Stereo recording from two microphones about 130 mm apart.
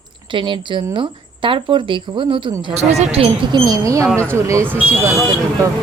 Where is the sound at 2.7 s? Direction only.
55° right (ahead or behind).